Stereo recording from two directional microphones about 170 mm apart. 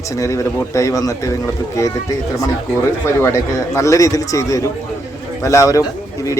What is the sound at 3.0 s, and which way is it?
A man's voice, 15° left (ahead or behind).